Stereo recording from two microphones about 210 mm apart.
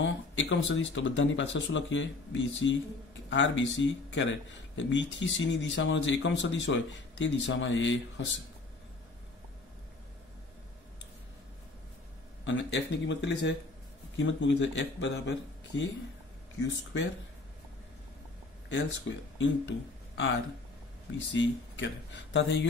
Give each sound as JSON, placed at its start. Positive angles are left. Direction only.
{"t": 0.0, "sound": "a sound", "side_deg": 60}
{"t": 0.7, "sound": "speech", "side_deg": 65}
{"t": 12.4, "sound": "speech", "side_deg": 60}
{"t": 19.3, "sound": "speech", "side_deg": 60}
{"t": 21.3, "sound": "speech", "side_deg": 60}